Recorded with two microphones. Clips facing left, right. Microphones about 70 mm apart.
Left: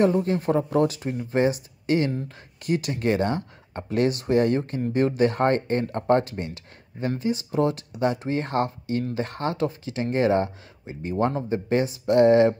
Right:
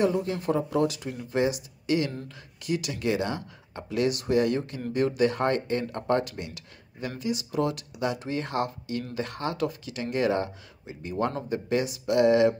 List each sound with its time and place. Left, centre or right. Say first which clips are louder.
0.0 s speech: left 4 dB; left